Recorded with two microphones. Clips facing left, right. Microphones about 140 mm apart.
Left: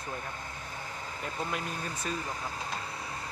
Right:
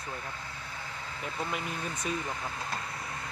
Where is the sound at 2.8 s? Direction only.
30° left (ahead or behind).